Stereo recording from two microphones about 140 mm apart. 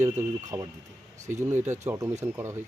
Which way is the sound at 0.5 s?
25° right (ahead or behind).